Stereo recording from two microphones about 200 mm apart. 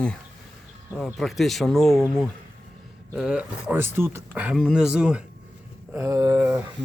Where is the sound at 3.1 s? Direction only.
5° right (ahead or behind).